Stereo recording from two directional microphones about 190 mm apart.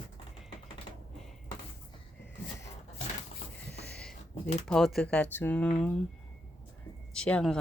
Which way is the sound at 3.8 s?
5° left (ahead or behind).